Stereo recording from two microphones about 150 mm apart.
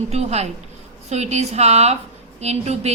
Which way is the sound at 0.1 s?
45° right (ahead or behind).